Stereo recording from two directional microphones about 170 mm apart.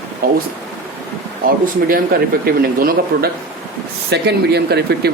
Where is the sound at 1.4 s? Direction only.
55° right (ahead or behind).